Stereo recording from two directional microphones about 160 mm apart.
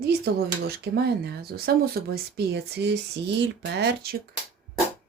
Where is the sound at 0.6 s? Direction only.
90° right.